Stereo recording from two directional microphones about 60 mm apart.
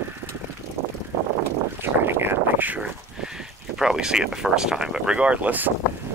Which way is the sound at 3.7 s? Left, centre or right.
Centre.